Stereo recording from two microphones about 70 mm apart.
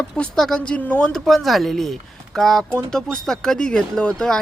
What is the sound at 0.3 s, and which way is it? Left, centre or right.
Speech, centre.